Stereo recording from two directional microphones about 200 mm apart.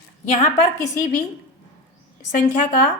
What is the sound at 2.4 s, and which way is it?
Speech, 45° left (ahead or behind).